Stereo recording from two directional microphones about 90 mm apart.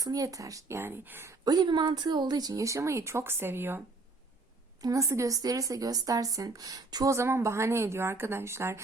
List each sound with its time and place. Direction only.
0.0 s speech: 40° right (ahead or behind)
0.8 s speech: 25° right (ahead or behind)
1.5 s speech: 50° right (ahead or behind); by 3.8 s 25° right (ahead or behind)
4.8 s speech: 40° right (ahead or behind)